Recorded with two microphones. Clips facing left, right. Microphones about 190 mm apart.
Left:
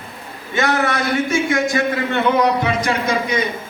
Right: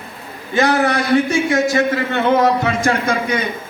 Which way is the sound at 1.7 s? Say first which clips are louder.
Right 2 dB; 45° right (ahead or behind).